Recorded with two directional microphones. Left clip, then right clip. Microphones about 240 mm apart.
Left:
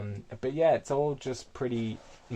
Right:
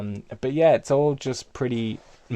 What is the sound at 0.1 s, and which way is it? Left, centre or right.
Speech, right.